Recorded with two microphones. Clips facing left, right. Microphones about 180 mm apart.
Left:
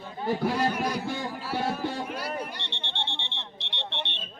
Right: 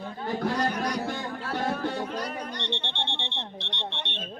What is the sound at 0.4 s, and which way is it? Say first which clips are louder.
Speech: even; 10° left (ahead or behind).